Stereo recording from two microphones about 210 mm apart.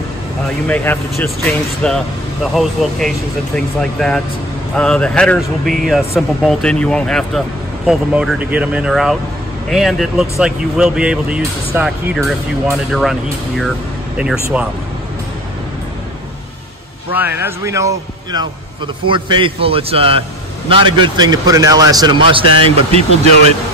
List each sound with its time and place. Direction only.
0.7 s speech: 10° left (ahead or behind)
17.1 s a man's voice: 10° right (ahead or behind); by 23.0 s 25° right (ahead or behind)